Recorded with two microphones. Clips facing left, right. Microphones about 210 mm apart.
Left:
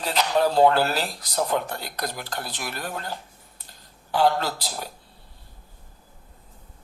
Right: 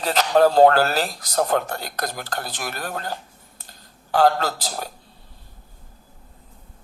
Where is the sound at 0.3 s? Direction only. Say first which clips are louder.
Right 5 dB; 45° right (ahead or behind).